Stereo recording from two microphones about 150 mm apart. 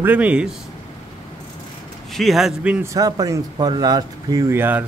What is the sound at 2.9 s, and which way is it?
Speech, 25° right (ahead or behind).